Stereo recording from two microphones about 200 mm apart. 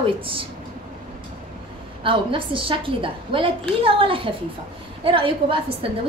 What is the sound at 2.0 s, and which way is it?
A woman's voice, 25° right (ahead or behind).